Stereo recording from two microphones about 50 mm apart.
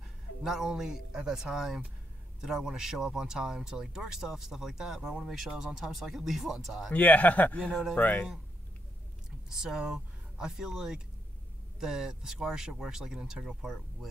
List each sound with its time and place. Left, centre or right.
0.4 s speech: centre
6.9 s speech: left
9.5 s speech: centre